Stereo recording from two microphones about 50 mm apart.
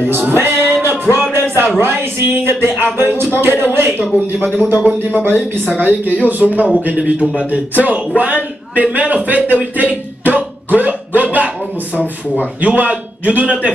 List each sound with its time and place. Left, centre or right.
0.3 s a sound: right
0.8 s music: right
1.8 s a man's voice: right
9.8 s music: right
11.2 s a man's voice: right